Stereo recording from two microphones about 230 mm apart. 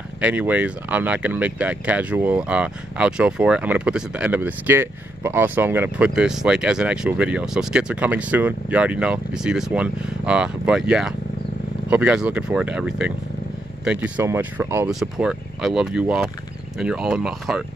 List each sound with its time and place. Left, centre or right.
0.2 s speech: centre